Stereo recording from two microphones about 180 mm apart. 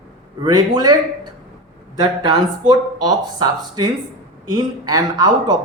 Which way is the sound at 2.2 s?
25° right (ahead or behind).